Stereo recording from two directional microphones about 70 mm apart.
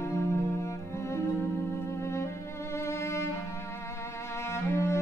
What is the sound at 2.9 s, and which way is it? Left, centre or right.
Music, left.